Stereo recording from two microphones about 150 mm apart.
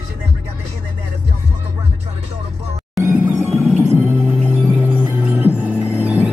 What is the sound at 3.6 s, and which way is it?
Music, 10° right (ahead or behind).